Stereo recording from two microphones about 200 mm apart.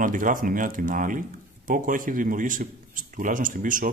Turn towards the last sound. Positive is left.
turn(degrees=-40)  # may be behind; listen again after turning